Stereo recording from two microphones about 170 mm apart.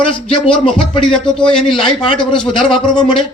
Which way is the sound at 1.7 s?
5° left (ahead or behind).